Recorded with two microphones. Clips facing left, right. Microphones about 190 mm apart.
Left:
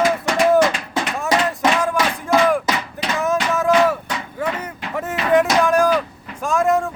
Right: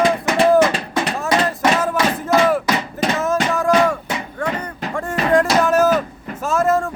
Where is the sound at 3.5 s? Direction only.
Centre (ahead or behind).